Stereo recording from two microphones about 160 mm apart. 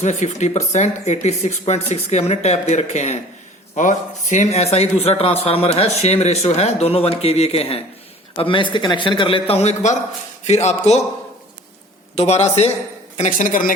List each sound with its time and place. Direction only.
0.0 s speech: 45° left (ahead or behind)
12.1 s speech: 45° left (ahead or behind); by 13.7 s 60° left (ahead or behind)